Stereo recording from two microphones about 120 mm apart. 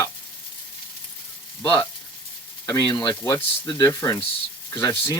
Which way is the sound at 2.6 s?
30° left (ahead or behind).